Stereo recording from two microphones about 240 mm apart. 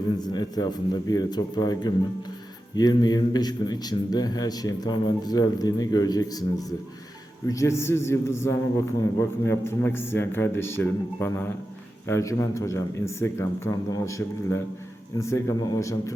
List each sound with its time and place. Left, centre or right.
0.2 s a man's voice: centre